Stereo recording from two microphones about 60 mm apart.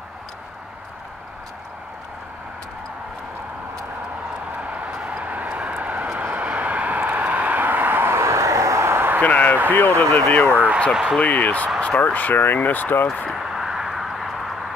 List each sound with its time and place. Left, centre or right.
4.6 s vehicle: right
9.2 s basketball bounce: left
9.7 s speech: left
10.9 s speech: centre
11.1 s speech: centre; by 13.1 s left
13.3 s a sound: centre